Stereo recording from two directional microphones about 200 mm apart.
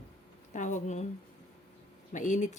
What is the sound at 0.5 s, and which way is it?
Speech, 40° left (ahead or behind).